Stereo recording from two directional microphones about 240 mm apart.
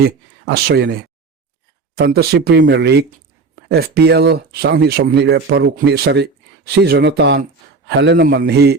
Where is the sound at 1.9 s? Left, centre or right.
Right.